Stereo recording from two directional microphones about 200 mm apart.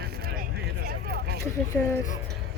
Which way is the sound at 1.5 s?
15° left (ahead or behind).